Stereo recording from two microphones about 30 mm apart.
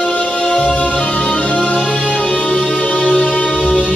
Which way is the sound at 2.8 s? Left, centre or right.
Left.